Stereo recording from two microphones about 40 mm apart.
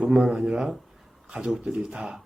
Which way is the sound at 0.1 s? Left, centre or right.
Centre.